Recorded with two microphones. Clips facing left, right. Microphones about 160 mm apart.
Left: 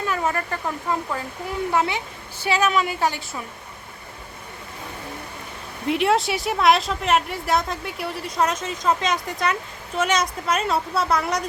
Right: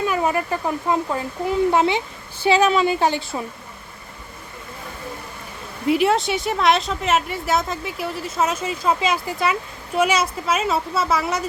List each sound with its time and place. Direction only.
0.0 s speech: 15° right (ahead or behind)
5.9 s a woman's voice: centre (ahead or behind)